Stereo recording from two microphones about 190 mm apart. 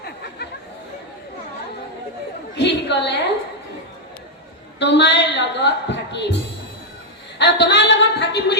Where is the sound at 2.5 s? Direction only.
65° left (ahead or behind).